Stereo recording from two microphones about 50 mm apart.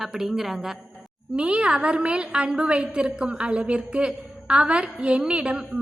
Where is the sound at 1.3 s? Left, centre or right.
Right.